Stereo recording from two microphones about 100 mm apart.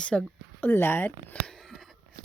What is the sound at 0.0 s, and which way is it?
A woman's voice, 10° left (ahead or behind).